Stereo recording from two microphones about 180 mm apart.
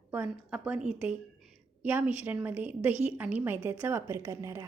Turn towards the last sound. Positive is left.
turn(degrees=-15)  # may be behind; listen again after turning